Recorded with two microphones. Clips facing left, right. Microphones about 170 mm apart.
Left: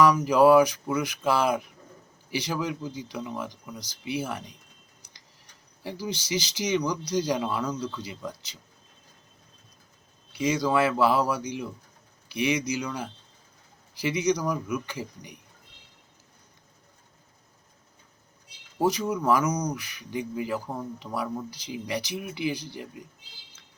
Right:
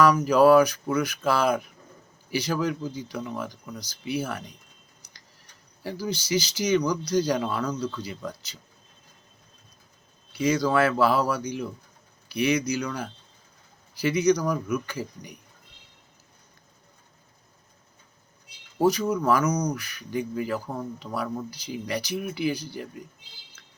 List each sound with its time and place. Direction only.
0.0 s speech: 15° left (ahead or behind)
5.8 s speech: 20° left (ahead or behind)
10.3 s speech: 20° left (ahead or behind)
18.8 s speech: 20° left (ahead or behind)